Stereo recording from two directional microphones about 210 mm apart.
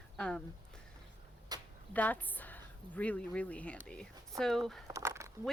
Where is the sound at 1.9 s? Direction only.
10° left (ahead or behind).